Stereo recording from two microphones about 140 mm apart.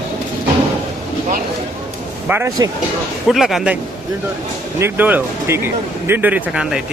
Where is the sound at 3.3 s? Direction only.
Centre (ahead or behind).